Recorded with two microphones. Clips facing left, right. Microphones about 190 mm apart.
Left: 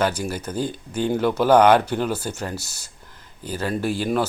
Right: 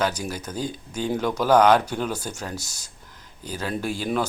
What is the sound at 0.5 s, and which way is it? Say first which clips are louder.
Speech: left 4 dB; 55° left (ahead or behind).